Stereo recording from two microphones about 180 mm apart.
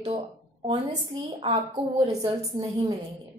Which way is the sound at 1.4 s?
30° right (ahead or behind).